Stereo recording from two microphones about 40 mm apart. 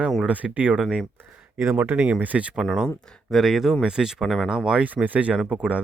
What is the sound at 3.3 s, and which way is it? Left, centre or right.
Speech, centre.